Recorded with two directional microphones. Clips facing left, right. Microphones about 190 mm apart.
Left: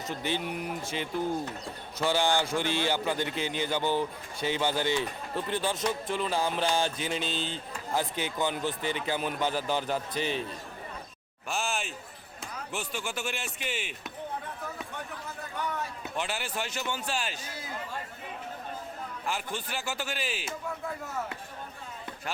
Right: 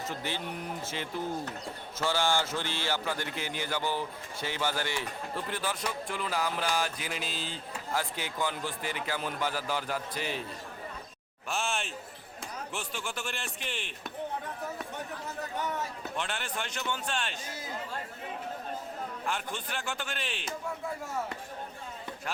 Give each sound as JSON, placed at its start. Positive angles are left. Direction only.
{"t": 0.0, "sound": "speech", "side_deg": 20}
{"t": 2.0, "sound": "mantra", "side_deg": 15}
{"t": 11.4, "sound": "speech", "side_deg": 0}
{"t": 16.0, "sound": "speech", "side_deg": 5}
{"t": 19.2, "sound": "speech", "side_deg": 5}